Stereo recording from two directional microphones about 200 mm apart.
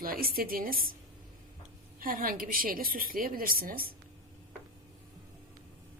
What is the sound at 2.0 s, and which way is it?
A woman's voice, 45° right (ahead or behind).